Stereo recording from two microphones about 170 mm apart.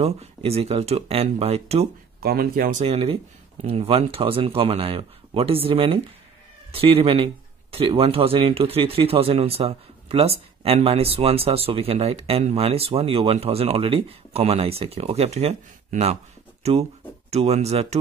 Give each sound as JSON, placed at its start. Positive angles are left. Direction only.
{"t": 0.0, "sound": "speech", "side_deg": -35}
{"t": 2.1, "sound": "speech", "side_deg": -60}
{"t": 2.8, "sound": "speech", "side_deg": -35}
{"t": 17.3, "sound": "speech", "side_deg": -40}